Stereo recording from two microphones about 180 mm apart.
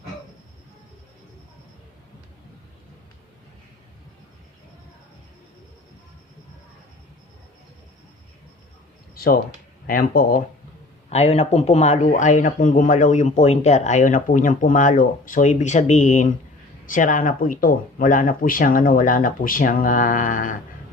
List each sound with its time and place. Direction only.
9.1 s speech: 55° left (ahead or behind)
11.1 s speech: 35° left (ahead or behind)